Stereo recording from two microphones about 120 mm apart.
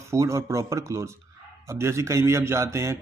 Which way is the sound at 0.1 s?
25° right (ahead or behind).